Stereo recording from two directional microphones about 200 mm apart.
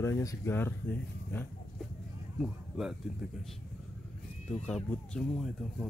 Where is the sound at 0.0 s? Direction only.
15° left (ahead or behind).